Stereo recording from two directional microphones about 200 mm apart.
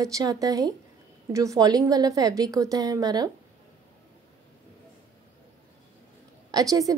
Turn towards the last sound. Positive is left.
turn(degrees=-15)  # may be behind; listen again after turning